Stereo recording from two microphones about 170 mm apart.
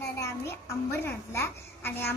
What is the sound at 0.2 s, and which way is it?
A child's voice, 15° left (ahead or behind).